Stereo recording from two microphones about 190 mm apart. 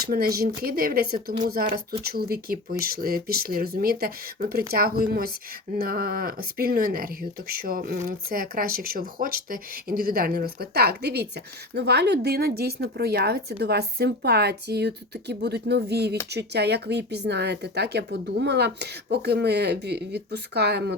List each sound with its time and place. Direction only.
0.0 s speech: 50° right (ahead or behind)